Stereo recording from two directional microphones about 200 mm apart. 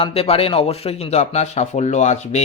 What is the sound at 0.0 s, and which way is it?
A man's voice, 30° left (ahead or behind).